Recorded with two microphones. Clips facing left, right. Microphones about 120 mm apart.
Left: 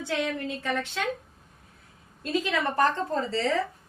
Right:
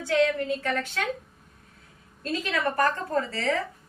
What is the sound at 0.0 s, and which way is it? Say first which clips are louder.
A woman's voice: right 6 dB; 15° left (ahead or behind).